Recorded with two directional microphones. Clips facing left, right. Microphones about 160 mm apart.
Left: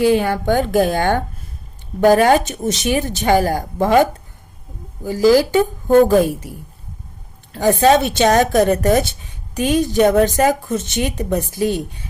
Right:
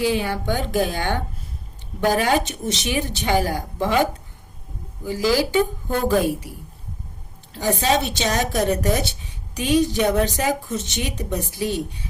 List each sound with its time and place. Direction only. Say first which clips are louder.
0.0 s a woman's voice: left 7 dB; 50° left (ahead or behind)
5.0 s a woman's voice: left 7 dB; 45° left (ahead or behind)
7.5 s a woman's voice: left 7 dB; 55° left (ahead or behind)